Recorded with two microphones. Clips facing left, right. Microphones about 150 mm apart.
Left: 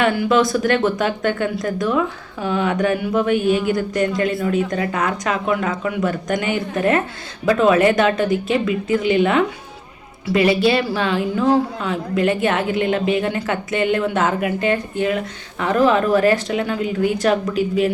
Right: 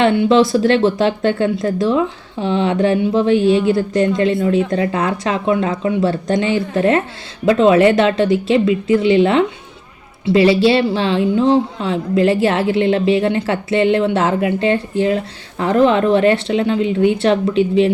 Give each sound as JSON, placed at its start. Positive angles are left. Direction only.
{"t": 0.0, "sound": "a woman's voice", "side_deg": -25}